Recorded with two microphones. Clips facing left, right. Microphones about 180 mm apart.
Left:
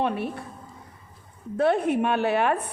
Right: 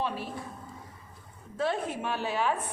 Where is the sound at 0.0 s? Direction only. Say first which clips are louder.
Left 7 dB; 60° left (ahead or behind).